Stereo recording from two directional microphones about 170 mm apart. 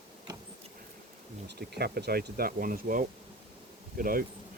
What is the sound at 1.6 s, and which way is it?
Speech, 70° right (ahead or behind).